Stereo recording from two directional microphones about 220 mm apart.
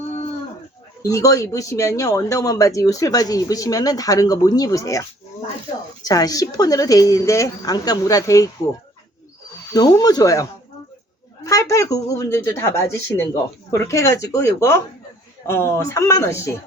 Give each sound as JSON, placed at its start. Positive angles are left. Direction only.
{"t": 1.0, "sound": "speech", "side_deg": 15}
{"t": 6.1, "sound": "speech", "side_deg": 15}
{"t": 9.7, "sound": "speech", "side_deg": 15}
{"t": 11.4, "sound": "speech", "side_deg": 15}